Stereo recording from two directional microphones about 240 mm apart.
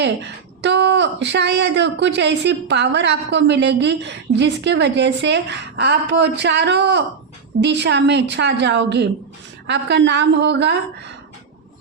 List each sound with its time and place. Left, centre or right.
0.0 s a woman's voice: right